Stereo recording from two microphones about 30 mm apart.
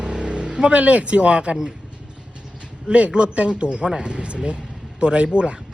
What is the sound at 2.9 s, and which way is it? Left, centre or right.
Speech, right.